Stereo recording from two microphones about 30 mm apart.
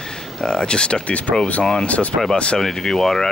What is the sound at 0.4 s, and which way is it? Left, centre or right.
Speech, left.